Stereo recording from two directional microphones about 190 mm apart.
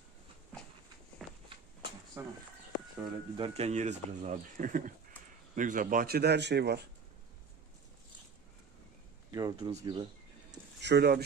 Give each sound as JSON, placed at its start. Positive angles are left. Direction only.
{"t": 1.2, "sound": "walk", "side_deg": 0}
{"t": 2.2, "sound": "speech", "side_deg": -10}
{"t": 3.0, "sound": "speech", "side_deg": -25}
{"t": 9.3, "sound": "speech", "side_deg": -20}
{"t": 10.8, "sound": "speech", "side_deg": -60}